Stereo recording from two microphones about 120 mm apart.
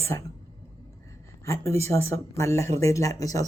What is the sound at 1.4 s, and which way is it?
Speech, 25° left (ahead or behind).